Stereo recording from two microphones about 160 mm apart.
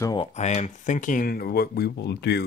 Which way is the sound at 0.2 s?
45° left (ahead or behind).